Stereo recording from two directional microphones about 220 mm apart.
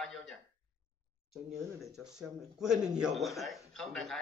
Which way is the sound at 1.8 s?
Centre (ahead or behind).